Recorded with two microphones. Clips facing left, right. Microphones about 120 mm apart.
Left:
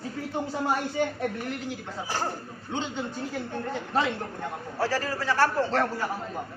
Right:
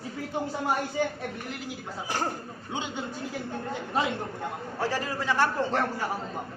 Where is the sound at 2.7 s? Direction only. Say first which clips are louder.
Left 2 dB; 10° right (ahead or behind).